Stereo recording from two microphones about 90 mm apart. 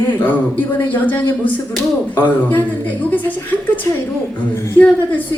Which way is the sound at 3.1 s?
20° left (ahead or behind).